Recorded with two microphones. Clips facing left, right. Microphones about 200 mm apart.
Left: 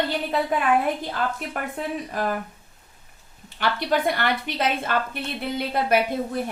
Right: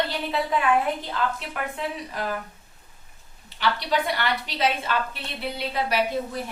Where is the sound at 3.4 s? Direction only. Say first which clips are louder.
Left 2 dB; 50° left (ahead or behind).